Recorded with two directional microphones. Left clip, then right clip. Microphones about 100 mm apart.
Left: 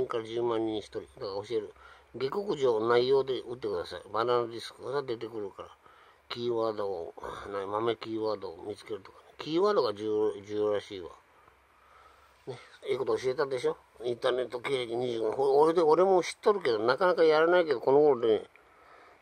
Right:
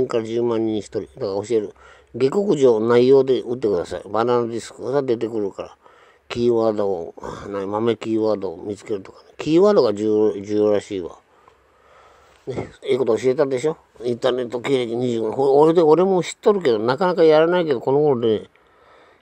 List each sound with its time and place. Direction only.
0.1 s speech: 25° right (ahead or behind)
2.4 s speech: 25° right (ahead or behind)
12.4 s speech: 30° right (ahead or behind); by 18.3 s 10° right (ahead or behind)